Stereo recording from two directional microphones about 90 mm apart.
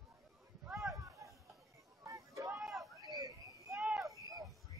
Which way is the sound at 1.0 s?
35° right (ahead or behind).